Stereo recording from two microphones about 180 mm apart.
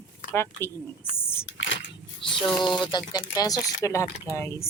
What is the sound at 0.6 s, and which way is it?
Speech, 15° left (ahead or behind).